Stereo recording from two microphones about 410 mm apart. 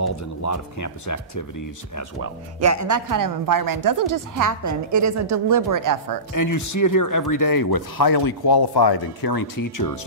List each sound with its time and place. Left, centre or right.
0.1 s speech: left
2.6 s a woman's voice: right
6.3 s speech: left